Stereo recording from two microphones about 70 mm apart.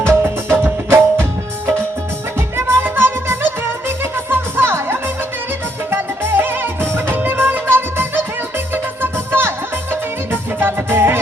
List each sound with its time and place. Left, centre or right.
0.0 s music: right
2.6 s music: right
10.6 s music: right